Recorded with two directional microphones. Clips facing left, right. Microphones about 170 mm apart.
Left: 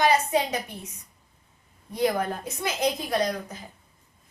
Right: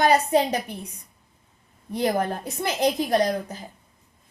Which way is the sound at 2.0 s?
40° right (ahead or behind).